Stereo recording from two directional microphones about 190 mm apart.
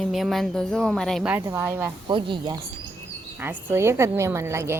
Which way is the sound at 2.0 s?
25° right (ahead or behind).